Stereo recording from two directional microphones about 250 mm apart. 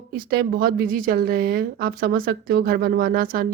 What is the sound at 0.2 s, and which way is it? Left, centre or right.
Speech, right.